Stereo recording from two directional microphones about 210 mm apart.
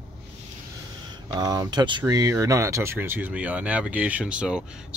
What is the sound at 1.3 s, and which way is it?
Speech, 20° right (ahead or behind).